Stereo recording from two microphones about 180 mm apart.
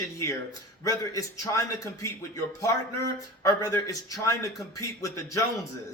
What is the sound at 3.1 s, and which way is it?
A man's voice, 20° left (ahead or behind).